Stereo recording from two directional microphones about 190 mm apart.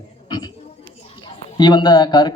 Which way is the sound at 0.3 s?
20° left (ahead or behind).